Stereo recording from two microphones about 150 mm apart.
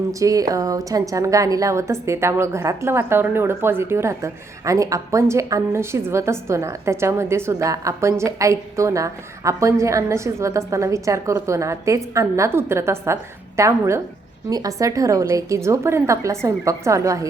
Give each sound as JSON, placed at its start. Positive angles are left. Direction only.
{"t": 0.1, "sound": "a woman's voice", "side_deg": -20}